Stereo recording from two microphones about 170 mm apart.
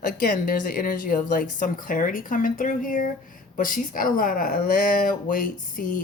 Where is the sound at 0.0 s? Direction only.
55° left (ahead or behind).